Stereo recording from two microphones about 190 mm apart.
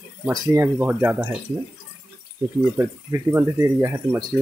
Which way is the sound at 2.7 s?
15° right (ahead or behind).